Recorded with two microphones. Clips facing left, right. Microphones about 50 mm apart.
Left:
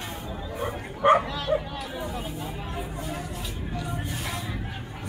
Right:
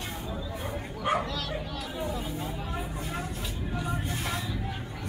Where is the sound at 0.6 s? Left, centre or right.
Left.